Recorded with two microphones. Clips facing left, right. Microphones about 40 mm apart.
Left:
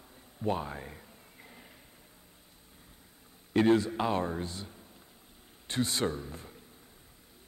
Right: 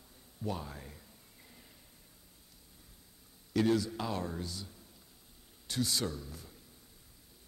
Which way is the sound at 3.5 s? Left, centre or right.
Left.